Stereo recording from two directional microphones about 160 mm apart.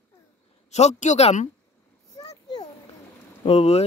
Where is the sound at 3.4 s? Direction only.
40° left (ahead or behind).